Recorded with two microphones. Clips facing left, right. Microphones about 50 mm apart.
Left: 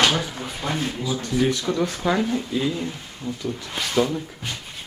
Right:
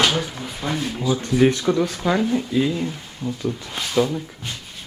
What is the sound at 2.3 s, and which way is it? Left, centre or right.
Speech, centre.